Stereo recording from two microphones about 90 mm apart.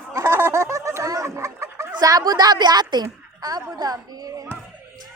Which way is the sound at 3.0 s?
45° right (ahead or behind).